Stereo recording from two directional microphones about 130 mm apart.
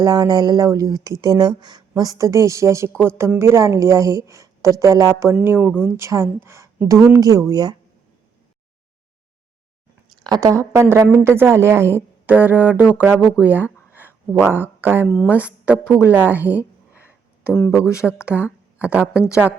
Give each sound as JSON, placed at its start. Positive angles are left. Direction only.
{"t": 0.0, "sound": "a woman's voice", "side_deg": -30}
{"t": 10.2, "sound": "a woman's voice", "side_deg": -25}
{"t": 15.0, "sound": "speech", "side_deg": 0}
{"t": 15.3, "sound": "speech", "side_deg": -10}
{"t": 16.0, "sound": "a sound", "side_deg": -15}
{"t": 18.0, "sound": "speech", "side_deg": -10}